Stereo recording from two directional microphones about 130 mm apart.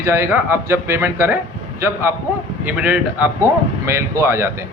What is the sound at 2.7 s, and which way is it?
A man's voice, 10° right (ahead or behind).